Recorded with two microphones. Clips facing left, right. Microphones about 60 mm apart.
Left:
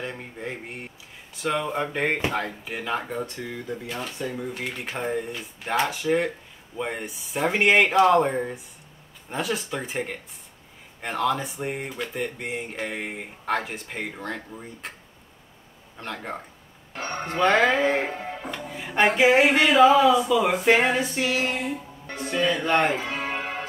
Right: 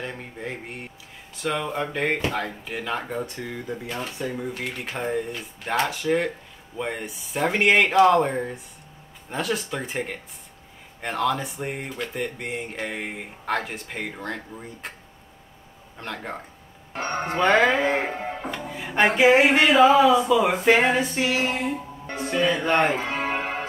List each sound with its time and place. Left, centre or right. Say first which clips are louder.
0.0 s a sound: even; centre
1.3 s speech: left 1 dB; centre
4.6 s speech: right 1 dB; centre
16.0 s speech: even; centre
16.9 s speech: right 4 dB; right
17.3 s speech: right 1 dB; centre
18.2 s music: right 3 dB; right
18.7 s speech: even; centre
21.0 s a woman's voice: right 1 dB; centre
22.1 s speech: right 1 dB; centre
22.9 s music: right 3 dB; right